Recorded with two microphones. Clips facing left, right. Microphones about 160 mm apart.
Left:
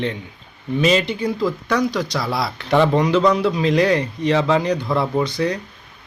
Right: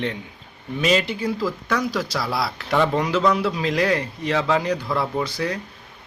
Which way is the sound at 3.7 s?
5° right (ahead or behind).